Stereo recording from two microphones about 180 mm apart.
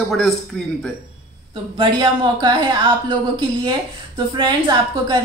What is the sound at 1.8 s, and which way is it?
A woman's voice, 25° right (ahead or behind).